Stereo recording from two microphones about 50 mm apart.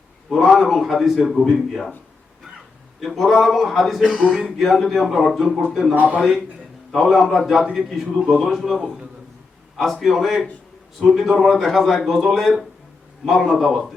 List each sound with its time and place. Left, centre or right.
0.3 s a man's voice: centre
3.0 s a man's voice: centre
4.2 s music: right
4.5 s a man's voice: centre
5.9 s a man's voice: right
6.9 s a man's voice: centre